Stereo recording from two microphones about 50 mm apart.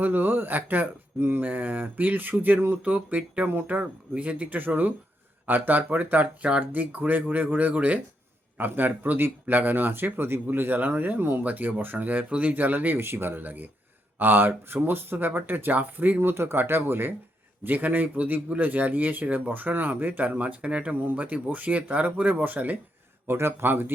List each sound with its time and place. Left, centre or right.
0.0 s a man's voice: right
2.8 s a man's voice: right
8.5 s a man's voice: right
13.0 s a man's voice: right
16.3 s a man's voice: right
23.2 s a man's voice: right